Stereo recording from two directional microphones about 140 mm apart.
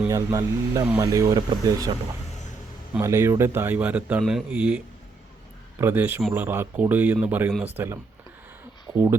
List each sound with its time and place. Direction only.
0.1 s speech: 20° right (ahead or behind)
3.0 s speech: 20° right (ahead or behind)
5.8 s speech: 15° right (ahead or behind)